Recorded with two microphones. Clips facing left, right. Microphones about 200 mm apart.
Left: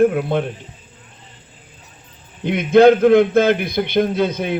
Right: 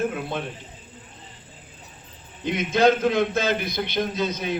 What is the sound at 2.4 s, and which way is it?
A man's voice, 60° left (ahead or behind).